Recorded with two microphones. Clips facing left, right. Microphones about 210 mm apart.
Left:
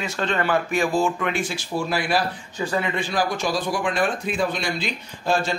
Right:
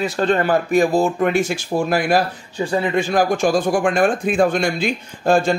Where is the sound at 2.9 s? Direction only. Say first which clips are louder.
Right 7 dB; 45° right (ahead or behind).